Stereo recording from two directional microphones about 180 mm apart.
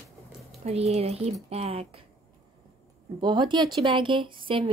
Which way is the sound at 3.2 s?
25° right (ahead or behind).